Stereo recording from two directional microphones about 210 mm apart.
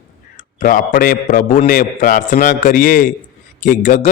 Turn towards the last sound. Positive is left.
turn(degrees=35)  # may be behind; listen again after turning